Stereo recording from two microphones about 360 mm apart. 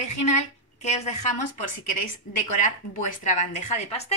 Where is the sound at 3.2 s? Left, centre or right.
Centre.